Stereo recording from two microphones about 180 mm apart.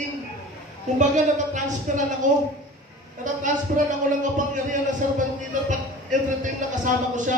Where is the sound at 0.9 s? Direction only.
45° right (ahead or behind).